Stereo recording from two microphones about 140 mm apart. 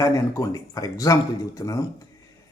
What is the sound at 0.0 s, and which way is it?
Speech, 25° left (ahead or behind).